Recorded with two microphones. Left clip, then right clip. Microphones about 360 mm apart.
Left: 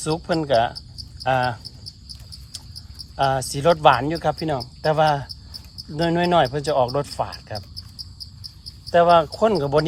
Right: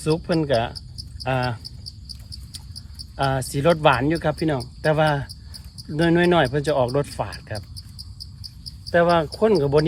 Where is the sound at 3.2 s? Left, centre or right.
Centre.